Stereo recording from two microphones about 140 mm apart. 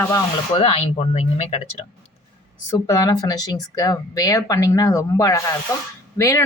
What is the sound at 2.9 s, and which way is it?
Speech, 25° left (ahead or behind).